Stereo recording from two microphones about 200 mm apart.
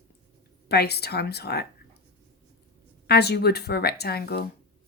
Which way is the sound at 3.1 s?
55° left (ahead or behind).